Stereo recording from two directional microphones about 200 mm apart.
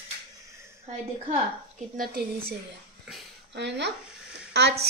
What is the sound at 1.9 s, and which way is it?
Speech, 50° right (ahead or behind).